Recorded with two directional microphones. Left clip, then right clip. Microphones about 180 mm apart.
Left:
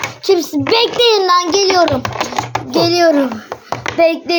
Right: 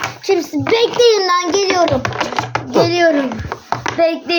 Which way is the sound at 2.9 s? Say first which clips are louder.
Left 4 dB; 35° left (ahead or behind).